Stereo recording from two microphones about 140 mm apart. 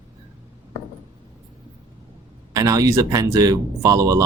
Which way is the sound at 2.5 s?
25° right (ahead or behind).